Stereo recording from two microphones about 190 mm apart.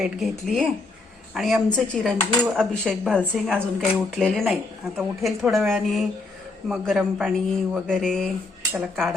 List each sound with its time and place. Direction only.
0.0 s speech: centre (ahead or behind)